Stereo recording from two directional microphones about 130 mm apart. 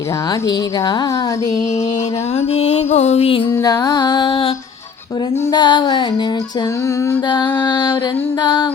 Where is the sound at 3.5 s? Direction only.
25° left (ahead or behind).